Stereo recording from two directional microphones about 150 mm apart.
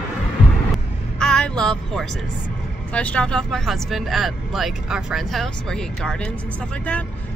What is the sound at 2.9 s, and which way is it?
Speech, 10° left (ahead or behind).